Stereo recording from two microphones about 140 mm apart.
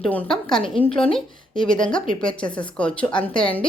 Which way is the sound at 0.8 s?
40° left (ahead or behind).